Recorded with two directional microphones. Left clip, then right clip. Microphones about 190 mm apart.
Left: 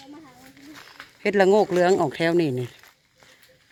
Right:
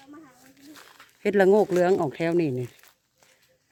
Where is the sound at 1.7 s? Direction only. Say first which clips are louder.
Left 2 dB; 10° right (ahead or behind).